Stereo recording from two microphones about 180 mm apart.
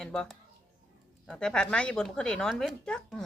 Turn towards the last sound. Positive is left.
turn(degrees=5)  # may be behind; listen again after turning